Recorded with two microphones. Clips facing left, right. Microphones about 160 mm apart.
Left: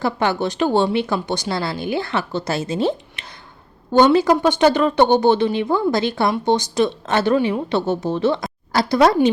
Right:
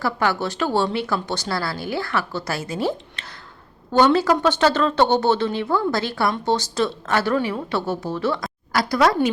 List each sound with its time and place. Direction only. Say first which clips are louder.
0.0 s a woman's voice: left 2 dB; 20° left (ahead or behind)